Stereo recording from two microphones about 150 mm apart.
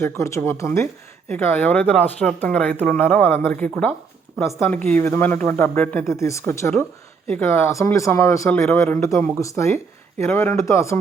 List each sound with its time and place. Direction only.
0.0 s speech: 20° left (ahead or behind)